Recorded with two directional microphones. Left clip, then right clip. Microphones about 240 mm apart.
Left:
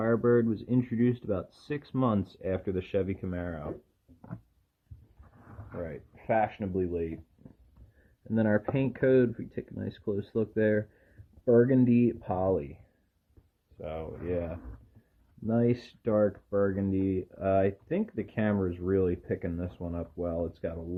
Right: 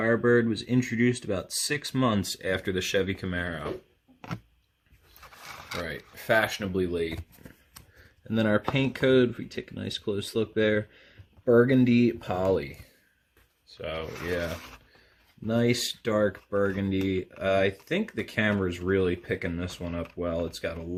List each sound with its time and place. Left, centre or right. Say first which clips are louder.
0.0 s speech: right 3 dB; right
5.8 s speech: right 4 dB; right
8.3 s speech: right 2 dB; right
13.8 s speech: right 4 dB; right
15.4 s speech: right 3 dB; right